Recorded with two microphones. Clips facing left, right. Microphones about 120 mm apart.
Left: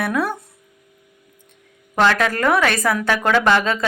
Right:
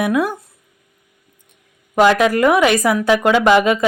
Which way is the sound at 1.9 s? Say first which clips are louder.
Right 5 dB; 10° right (ahead or behind).